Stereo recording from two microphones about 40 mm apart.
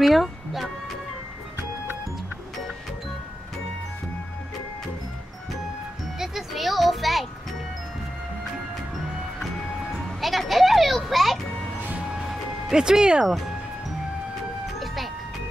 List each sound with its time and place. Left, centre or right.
0.0 s a child's voice: centre
6.1 s music: centre
8.9 s music: centre
12.7 s speech: centre